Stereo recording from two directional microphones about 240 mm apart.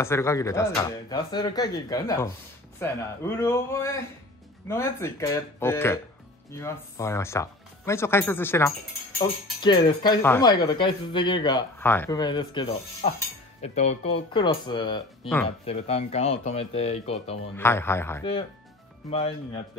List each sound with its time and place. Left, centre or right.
0.0 s speech: centre
9.6 s speech: centre
17.6 s speech: centre
19.0 s speech: left